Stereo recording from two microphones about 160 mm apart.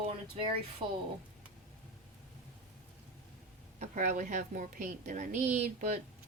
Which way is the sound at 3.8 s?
50° right (ahead or behind).